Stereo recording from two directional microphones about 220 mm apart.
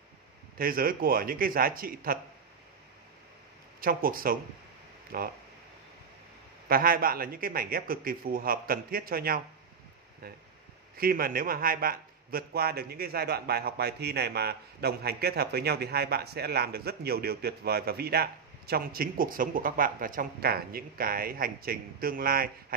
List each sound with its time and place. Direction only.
0.6 s a man's voice: 40° right (ahead or behind)
3.8 s a man's voice: 40° right (ahead or behind)
6.7 s a man's voice: 40° right (ahead or behind)